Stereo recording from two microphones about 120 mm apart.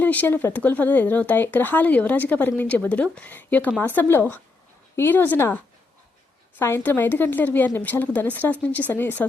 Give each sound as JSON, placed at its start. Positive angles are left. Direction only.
{"t": 0.0, "sound": "speech", "side_deg": 15}
{"t": 6.6, "sound": "speech", "side_deg": 20}